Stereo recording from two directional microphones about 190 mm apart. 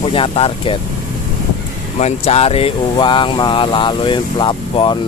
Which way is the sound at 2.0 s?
35° left (ahead or behind).